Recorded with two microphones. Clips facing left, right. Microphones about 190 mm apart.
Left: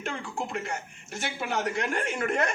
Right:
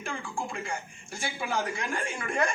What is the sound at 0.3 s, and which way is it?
Speech, 65° left (ahead or behind).